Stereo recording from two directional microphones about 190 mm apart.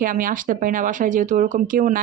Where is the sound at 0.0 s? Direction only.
45° right (ahead or behind).